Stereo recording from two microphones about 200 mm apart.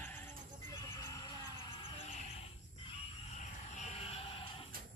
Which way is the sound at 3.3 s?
35° left (ahead or behind).